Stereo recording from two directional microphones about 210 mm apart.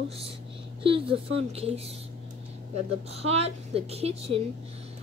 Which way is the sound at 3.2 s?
30° right (ahead or behind).